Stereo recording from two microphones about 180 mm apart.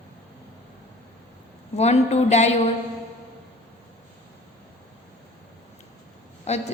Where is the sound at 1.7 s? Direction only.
35° left (ahead or behind).